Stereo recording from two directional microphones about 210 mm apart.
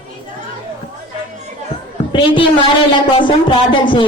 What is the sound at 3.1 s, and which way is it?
Speech, 25° left (ahead or behind).